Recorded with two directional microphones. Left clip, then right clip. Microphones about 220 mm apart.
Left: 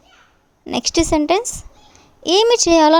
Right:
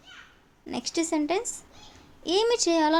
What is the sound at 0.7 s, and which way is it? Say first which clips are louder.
A woman's voice: left 11 dB; 40° left (ahead or behind).